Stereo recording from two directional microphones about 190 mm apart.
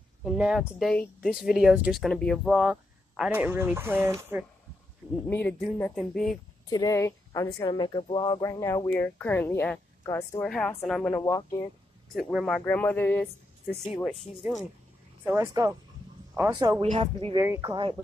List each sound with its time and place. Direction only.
0.2 s speech: 5° right (ahead or behind)
5.3 s speech: 10° left (ahead or behind)
6.7 s speech: 20° left (ahead or behind)
10.4 s speech: 5° left (ahead or behind)
11.1 s speech: 15° left (ahead or behind)
12.2 s speech: 5° right (ahead or behind)
15.2 s a woman's voice: 15° right (ahead or behind)
16.8 s a woman's voice: 30° right (ahead or behind)
17.4 s a woman's voice: 15° right (ahead or behind)